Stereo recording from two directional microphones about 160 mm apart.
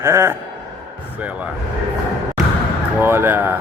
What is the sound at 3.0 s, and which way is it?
Speech, 15° right (ahead or behind).